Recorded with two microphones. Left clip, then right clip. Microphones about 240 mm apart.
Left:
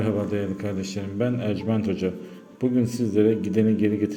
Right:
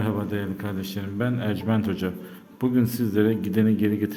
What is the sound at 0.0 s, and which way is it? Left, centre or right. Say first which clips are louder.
Speech: left 3 dB; centre.